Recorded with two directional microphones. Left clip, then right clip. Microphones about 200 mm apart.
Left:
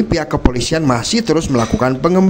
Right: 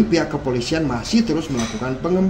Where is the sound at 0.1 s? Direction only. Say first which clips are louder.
Left 3 dB; 50° left (ahead or behind).